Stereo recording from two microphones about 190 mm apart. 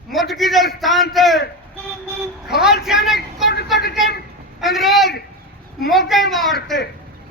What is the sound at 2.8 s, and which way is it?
Speech, centre (ahead or behind).